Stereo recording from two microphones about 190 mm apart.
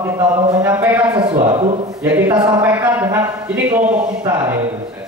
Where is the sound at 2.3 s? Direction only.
20° right (ahead or behind).